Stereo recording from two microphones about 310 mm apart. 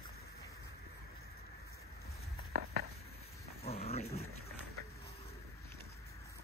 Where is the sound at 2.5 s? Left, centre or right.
Right.